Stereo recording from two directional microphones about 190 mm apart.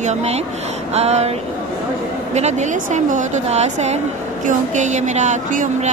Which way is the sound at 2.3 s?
35° right (ahead or behind).